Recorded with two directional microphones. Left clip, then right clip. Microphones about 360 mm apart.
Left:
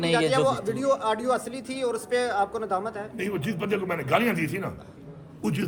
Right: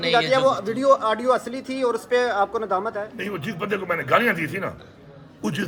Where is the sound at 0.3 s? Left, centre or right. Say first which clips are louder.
Right 4 dB; centre.